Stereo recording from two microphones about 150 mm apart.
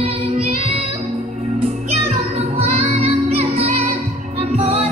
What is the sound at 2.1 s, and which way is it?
Music, 45° right (ahead or behind).